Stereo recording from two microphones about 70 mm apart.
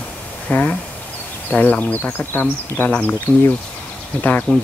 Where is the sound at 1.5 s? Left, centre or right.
Left.